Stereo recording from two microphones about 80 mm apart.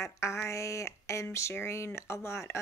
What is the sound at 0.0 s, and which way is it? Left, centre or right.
Speech, left.